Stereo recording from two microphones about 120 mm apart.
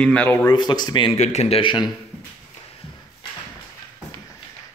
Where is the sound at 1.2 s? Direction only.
65° left (ahead or behind); by 1.9 s 40° left (ahead or behind).